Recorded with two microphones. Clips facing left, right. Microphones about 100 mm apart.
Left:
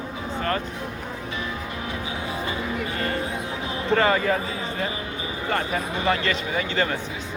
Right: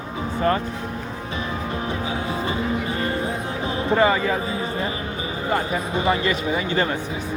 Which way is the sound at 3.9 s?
10° right (ahead or behind).